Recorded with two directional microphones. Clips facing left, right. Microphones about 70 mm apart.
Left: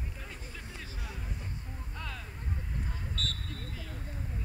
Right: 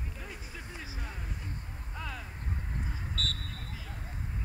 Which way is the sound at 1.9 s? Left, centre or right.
Centre.